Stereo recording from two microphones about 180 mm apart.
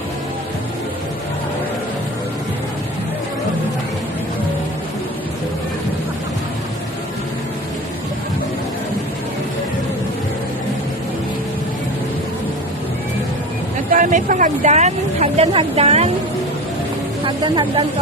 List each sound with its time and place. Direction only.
13.9 s speech: 45° right (ahead or behind)
17.2 s speech: 25° right (ahead or behind)